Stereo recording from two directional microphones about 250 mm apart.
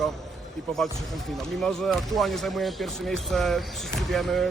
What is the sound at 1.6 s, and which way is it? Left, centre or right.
Speech, centre.